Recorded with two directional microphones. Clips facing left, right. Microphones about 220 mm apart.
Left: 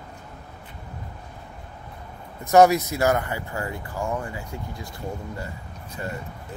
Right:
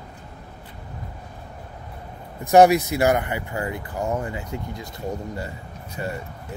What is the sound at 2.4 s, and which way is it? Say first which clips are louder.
Speech: right 2 dB; 15° right (ahead or behind).